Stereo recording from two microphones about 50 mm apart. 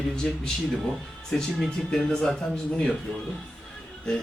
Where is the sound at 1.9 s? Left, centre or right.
Centre.